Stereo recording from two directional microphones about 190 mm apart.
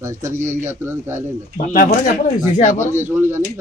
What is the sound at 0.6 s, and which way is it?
Speech, 15° right (ahead or behind).